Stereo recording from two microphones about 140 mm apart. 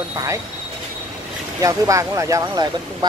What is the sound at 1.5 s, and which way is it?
Speech, 25° right (ahead or behind).